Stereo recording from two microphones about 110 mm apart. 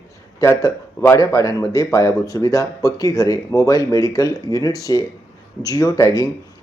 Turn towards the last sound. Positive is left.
turn(degrees=30)  # may be behind; listen again after turning